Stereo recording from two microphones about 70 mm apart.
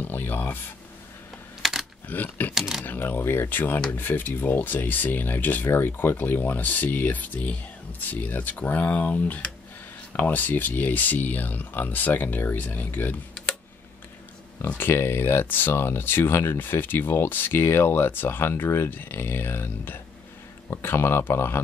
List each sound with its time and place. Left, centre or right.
0.0 s speech: left
1.6 s a sound: centre
2.0 s speech: left
2.5 s speech: centre
2.8 s speech: left
14.8 s speech: left